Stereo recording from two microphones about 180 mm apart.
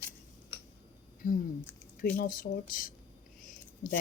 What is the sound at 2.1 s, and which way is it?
Speech, 50° left (ahead or behind).